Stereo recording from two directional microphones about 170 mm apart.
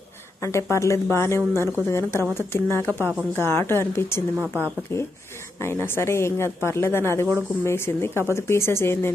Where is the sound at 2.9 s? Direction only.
15° right (ahead or behind).